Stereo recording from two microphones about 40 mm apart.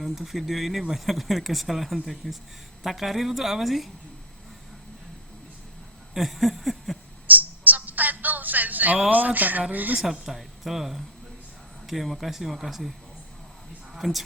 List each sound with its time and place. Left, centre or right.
0.0 s speech: centre
6.1 s speech: centre
7.3 s a sound: right
9.0 s speech: right
10.0 s speech: centre
14.0 s speech: centre